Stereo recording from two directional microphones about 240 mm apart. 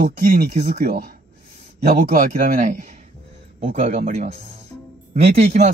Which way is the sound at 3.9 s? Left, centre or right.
Right.